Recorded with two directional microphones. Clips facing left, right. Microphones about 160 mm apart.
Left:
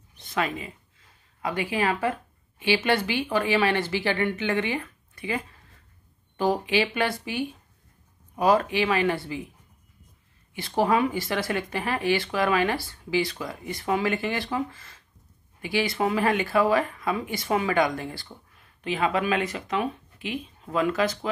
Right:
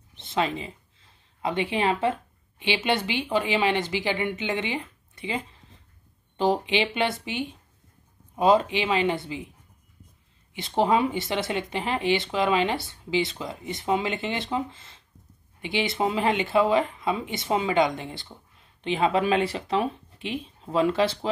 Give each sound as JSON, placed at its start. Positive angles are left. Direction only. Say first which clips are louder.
{"t": 0.1, "sound": "a sound", "louder": "right 2 dB", "side_deg": -25}
{"t": 1.4, "sound": "speech", "louder": "right 1 dB", "side_deg": -25}
{"t": 10.5, "sound": "speech", "louder": "right 1 dB", "side_deg": -20}